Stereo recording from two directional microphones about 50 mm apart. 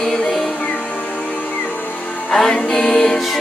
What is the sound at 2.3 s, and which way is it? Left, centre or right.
Music, centre.